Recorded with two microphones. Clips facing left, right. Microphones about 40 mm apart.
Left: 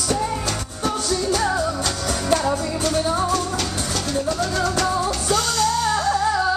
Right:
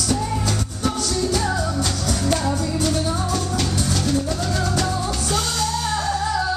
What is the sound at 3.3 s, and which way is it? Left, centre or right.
Music, centre.